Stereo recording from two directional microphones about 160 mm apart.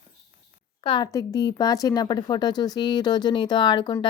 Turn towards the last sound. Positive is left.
turn(degrees=30)  # may be behind; listen again after turning